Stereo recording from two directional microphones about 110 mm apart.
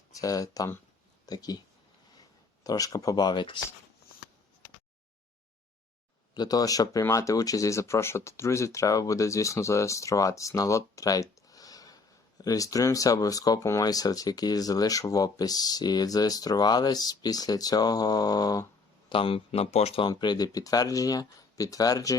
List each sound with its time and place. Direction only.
0.2 s speech: 30° left (ahead or behind)
2.6 s speech: 35° left (ahead or behind)
6.3 s speech: 35° left (ahead or behind)
19.0 s speech: 55° left (ahead or behind)
20.1 s speech: 40° left (ahead or behind)